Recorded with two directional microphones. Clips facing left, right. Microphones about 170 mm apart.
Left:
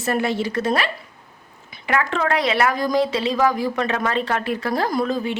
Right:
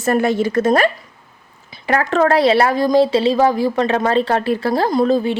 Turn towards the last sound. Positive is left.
turn(degrees=-30)  # may be behind; listen again after turning